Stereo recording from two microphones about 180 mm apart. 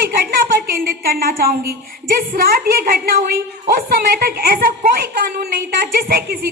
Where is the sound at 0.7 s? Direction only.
55° right (ahead or behind).